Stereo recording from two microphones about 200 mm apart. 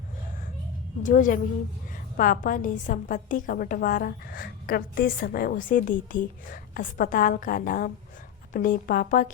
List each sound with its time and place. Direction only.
1.0 s a woman's voice: 40° left (ahead or behind)